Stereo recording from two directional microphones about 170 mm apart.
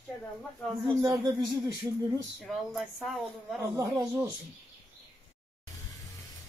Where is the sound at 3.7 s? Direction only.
20° right (ahead or behind).